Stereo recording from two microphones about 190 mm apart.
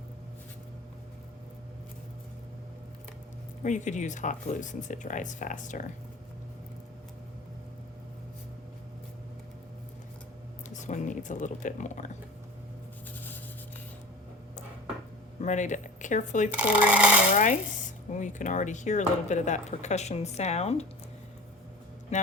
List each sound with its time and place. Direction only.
3.6 s speech: 40° left (ahead or behind)
10.7 s speech: 40° left (ahead or behind)
15.4 s speech: 40° left (ahead or behind)
16.5 s speech: 5° right (ahead or behind)
17.3 s speech: 40° left (ahead or behind)
22.1 s music: 35° left (ahead or behind)